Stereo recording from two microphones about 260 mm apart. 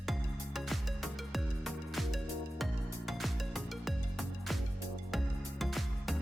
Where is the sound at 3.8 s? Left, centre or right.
Centre.